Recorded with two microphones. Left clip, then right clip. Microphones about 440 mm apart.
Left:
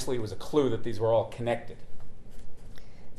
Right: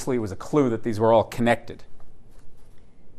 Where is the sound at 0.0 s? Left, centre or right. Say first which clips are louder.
Right 6 dB; right.